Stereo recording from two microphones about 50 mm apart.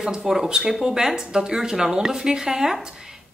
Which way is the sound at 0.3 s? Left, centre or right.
Centre.